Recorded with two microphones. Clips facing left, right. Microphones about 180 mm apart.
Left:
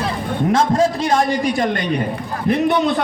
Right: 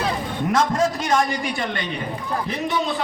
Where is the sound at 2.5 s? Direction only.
60° left (ahead or behind).